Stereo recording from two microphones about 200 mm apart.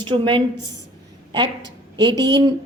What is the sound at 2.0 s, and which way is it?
Speech, 20° right (ahead or behind).